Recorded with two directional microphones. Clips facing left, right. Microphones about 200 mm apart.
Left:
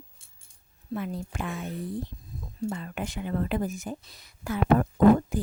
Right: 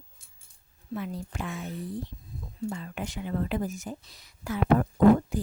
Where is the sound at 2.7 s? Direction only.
55° left (ahead or behind).